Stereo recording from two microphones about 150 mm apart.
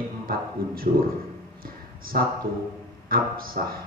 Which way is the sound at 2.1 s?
75° right (ahead or behind).